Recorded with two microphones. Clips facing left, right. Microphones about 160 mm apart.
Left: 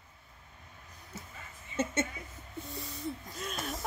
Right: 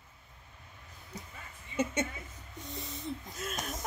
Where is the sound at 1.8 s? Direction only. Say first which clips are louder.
Even; 10° right (ahead or behind).